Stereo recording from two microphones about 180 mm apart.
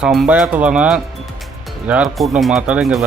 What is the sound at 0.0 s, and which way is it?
Speech, 5° right (ahead or behind).